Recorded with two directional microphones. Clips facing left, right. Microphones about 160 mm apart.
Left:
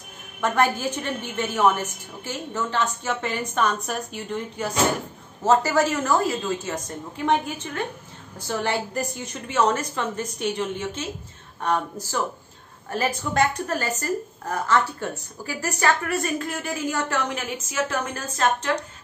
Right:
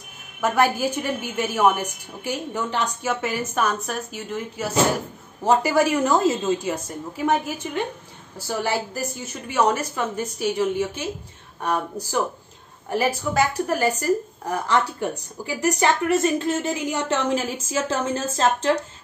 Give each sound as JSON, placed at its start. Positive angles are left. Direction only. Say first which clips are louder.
{"t": 0.4, "sound": "a woman's voice", "louder": "right 2 dB", "side_deg": -10}
{"t": 7.2, "sound": "a woman's voice", "louder": "even", "side_deg": -10}